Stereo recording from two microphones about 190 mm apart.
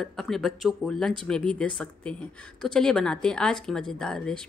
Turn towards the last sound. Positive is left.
turn(degrees=5)  # may be behind; listen again after turning